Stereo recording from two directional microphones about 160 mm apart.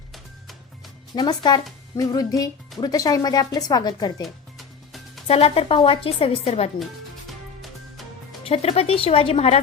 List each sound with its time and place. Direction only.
1.1 s speech: 25° left (ahead or behind)
4.2 s music: centre (ahead or behind)
5.3 s a woman's voice: 35° left (ahead or behind)
7.6 s music: centre (ahead or behind)
8.4 s a woman's voice: 40° left (ahead or behind)